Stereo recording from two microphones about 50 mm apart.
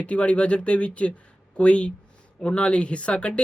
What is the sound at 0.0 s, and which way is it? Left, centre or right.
Speech, left.